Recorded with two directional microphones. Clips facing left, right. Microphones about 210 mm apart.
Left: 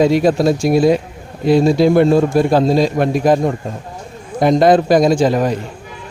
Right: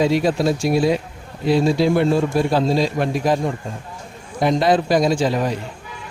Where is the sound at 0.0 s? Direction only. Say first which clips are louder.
Left 5 dB; 45° left (ahead or behind).